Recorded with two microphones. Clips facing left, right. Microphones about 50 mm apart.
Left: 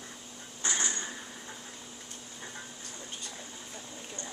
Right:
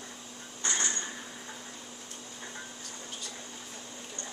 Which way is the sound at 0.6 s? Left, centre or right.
Centre.